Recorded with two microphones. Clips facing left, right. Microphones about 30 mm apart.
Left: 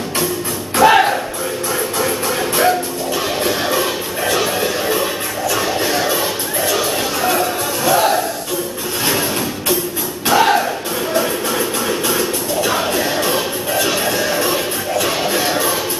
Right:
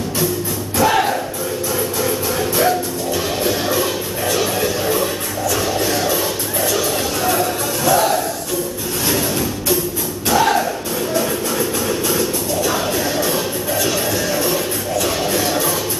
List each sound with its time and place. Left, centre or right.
0.7 s music: left
10.2 s music: left